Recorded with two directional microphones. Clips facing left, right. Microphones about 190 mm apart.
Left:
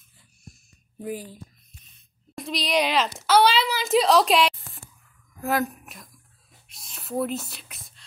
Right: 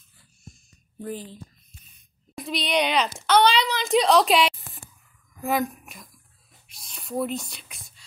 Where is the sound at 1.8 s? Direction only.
Centre (ahead or behind).